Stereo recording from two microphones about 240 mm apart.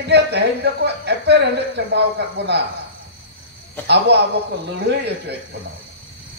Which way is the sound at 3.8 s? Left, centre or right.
Right.